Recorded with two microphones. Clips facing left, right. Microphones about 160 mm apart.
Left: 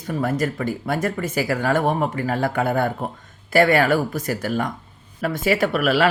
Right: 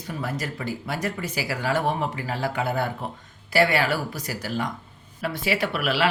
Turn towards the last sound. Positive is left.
turn(degrees=45)  # may be behind; listen again after turning